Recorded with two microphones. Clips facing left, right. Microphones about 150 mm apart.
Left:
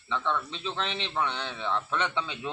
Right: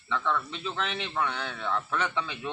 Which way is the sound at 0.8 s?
5° right (ahead or behind).